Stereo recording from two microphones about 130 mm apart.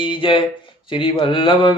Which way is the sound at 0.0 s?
40° left (ahead or behind).